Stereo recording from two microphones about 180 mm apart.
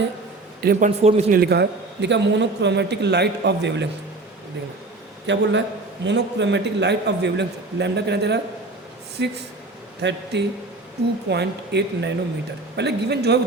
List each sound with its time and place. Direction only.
0.6 s a man's voice: 55° right (ahead or behind)
0.9 s a man's voice: 35° right (ahead or behind)
1.3 s a man's voice: 60° right (ahead or behind)
5.2 s a man's voice: 85° right; by 13.4 s 65° right (ahead or behind)